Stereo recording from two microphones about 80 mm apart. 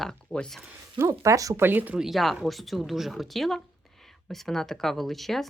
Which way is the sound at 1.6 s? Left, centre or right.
Right.